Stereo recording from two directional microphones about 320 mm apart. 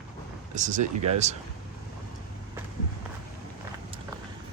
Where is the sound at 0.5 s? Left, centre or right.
Right.